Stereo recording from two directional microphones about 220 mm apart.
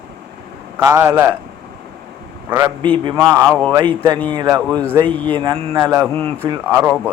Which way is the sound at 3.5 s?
5° left (ahead or behind).